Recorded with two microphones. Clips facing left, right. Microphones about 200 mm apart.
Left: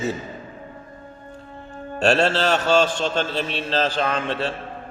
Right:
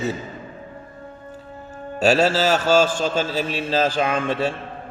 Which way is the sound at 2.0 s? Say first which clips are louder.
Right 1 dB; 5° right (ahead or behind).